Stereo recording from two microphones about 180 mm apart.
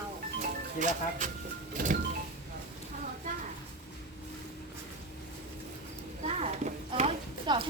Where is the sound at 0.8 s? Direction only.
45° right (ahead or behind).